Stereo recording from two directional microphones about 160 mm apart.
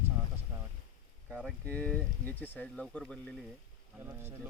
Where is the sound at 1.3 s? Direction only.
Centre (ahead or behind).